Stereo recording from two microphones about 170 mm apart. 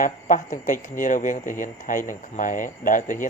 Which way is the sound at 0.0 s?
50° left (ahead or behind).